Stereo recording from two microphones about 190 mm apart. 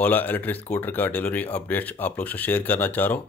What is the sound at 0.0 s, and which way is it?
Speech, 10° left (ahead or behind).